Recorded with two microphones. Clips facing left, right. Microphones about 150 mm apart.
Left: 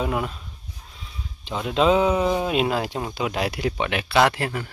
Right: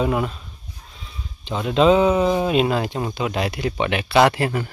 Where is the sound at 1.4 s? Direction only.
5° left (ahead or behind).